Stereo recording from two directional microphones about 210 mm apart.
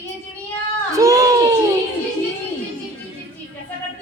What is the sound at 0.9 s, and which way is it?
Speech, 15° right (ahead or behind).